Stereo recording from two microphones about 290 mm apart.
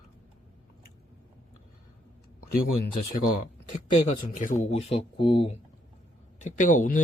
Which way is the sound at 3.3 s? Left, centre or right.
Left.